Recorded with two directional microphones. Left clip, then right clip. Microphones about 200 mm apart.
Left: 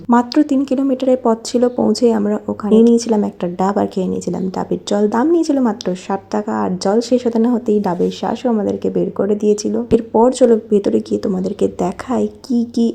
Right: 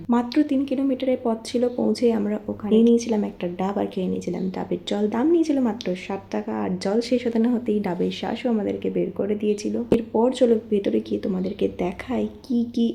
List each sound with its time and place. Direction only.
0.1 s speech: 30° left (ahead or behind)